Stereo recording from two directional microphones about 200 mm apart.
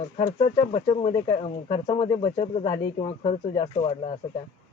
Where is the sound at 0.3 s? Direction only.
30° left (ahead or behind).